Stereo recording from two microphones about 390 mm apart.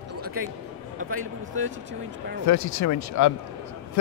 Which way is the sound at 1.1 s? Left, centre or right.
Right.